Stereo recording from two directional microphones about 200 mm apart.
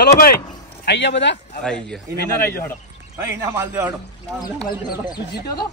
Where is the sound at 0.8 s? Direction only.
60° left (ahead or behind).